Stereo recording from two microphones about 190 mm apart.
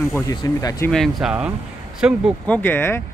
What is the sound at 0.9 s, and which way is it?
Speech, centre (ahead or behind).